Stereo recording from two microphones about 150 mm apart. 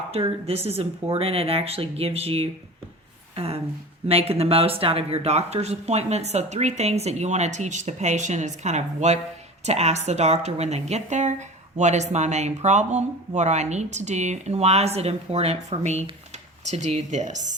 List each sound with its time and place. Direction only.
0.1 s speech: 40° right (ahead or behind)
3.3 s a sound: 40° right (ahead or behind)
4.1 s speech: 40° right (ahead or behind)